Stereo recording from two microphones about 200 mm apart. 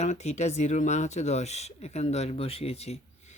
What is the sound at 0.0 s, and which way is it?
Speech, 35° left (ahead or behind).